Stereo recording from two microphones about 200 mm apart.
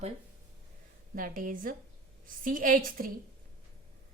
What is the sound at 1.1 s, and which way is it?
A woman's voice, 45° right (ahead or behind).